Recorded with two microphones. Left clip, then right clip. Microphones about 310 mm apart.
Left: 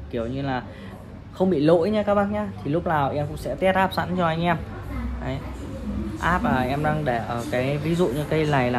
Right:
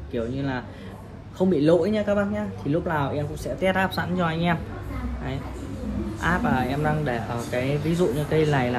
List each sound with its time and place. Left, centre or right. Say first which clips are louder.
0.1 s speech: left 1 dB; left
6.2 s speech: left 2 dB; left